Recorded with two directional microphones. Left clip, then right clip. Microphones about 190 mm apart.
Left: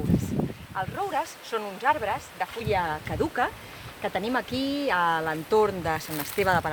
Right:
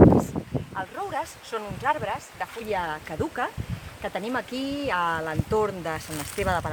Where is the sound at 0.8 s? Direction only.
10° left (ahead or behind).